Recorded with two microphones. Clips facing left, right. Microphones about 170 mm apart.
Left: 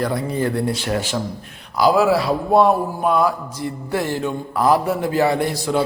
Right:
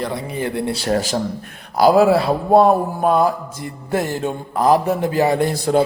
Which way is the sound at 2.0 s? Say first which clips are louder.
Right 3 dB; 55° right (ahead or behind).